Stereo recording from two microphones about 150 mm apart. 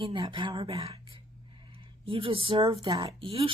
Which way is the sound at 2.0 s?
35° right (ahead or behind).